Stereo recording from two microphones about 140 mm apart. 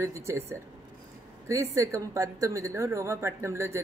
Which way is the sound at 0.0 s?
20° right (ahead or behind).